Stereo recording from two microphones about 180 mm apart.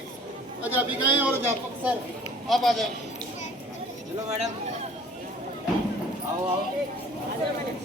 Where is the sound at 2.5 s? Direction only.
Centre (ahead or behind).